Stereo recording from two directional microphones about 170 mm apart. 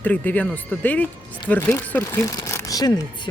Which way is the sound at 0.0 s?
10° left (ahead or behind).